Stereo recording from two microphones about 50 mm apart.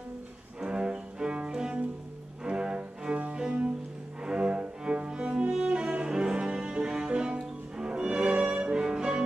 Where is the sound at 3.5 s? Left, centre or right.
Right.